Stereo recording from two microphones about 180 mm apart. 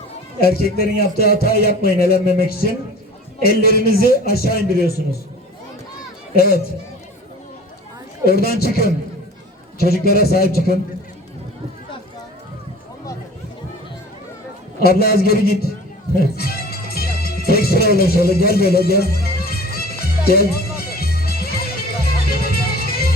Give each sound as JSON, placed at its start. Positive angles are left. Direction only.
{"t": 0.4, "sound": "a man's voice", "side_deg": 60}
{"t": 6.3, "sound": "a man's voice", "side_deg": 60}
{"t": 8.2, "sound": "a man's voice", "side_deg": 60}
{"t": 14.8, "sound": "a man's voice", "side_deg": 60}
{"t": 16.2, "sound": "music", "side_deg": 60}